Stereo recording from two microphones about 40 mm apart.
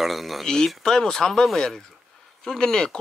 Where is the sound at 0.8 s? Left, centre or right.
Centre.